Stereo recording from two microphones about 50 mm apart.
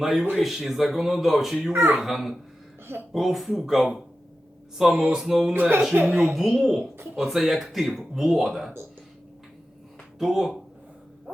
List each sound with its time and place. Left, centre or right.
0.0 s speech: centre
1.7 s a child's voice: right
2.0 s speech: centre
2.8 s speech: right
3.1 s speech: centre
5.9 s speech: right
6.3 s speech: centre
10.2 s speech: centre